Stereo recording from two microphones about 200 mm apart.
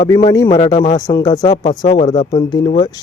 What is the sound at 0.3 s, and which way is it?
Speech, 20° left (ahead or behind).